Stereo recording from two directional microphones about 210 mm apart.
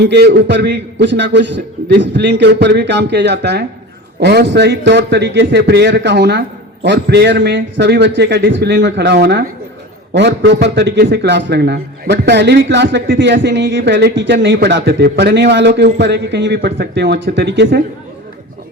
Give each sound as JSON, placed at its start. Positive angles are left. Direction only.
{"t": 0.0, "sound": "a man's voice", "side_deg": -50}